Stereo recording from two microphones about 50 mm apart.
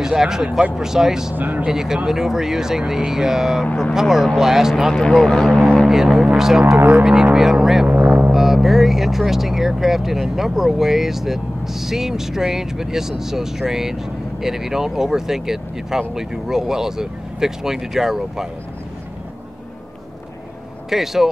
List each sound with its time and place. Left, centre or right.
0.0 s speech: centre
1.3 s speech: right
1.7 s speech: centre
4.9 s speech: centre
5.9 s speech: centre
7.8 s foghorn: right
8.3 s speech: centre
20.9 s speech: centre